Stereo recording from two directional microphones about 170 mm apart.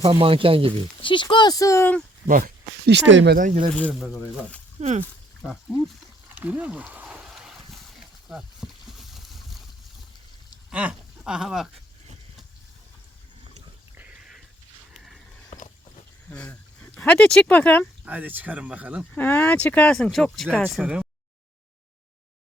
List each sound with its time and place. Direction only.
0.0 s speech: 30° right (ahead or behind)
1.0 s speech: 30° left (ahead or behind); by 2.0 s 10° left (ahead or behind)
2.2 s speech: 55° right (ahead or behind); by 3.3 s 90° right
3.3 s speech: 50° right (ahead or behind)
3.8 s speech: 5° left (ahead or behind)
4.8 s speech: 40° right (ahead or behind)
6.2 s a sound: 10° right (ahead or behind)
10.7 s speech: 5° right (ahead or behind)
13.9 s a sound: 5° right (ahead or behind)
15.5 s a sound: 50° left (ahead or behind)
16.3 s speech: 10° left (ahead or behind)
18.0 s speech: 10° right (ahead or behind)
19.1 s speech: 10° left (ahead or behind); by 21.1 s 5° right (ahead or behind)